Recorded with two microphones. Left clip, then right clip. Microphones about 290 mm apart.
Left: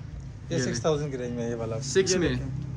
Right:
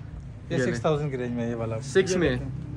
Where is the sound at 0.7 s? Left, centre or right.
Right.